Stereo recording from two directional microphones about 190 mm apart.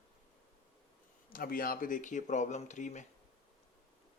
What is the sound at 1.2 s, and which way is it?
Speech, 50° left (ahead or behind).